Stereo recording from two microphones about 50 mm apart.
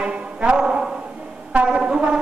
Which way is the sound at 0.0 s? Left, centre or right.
Right.